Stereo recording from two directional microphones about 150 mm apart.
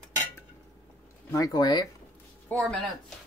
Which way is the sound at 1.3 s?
25° left (ahead or behind).